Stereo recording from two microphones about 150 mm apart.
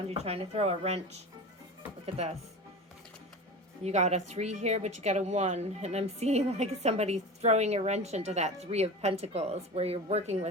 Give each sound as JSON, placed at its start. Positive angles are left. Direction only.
{"t": 0.1, "sound": "a woman's voice", "side_deg": -45}
{"t": 2.2, "sound": "a woman's voice", "side_deg": -45}
{"t": 3.8, "sound": "a woman's voice", "side_deg": -50}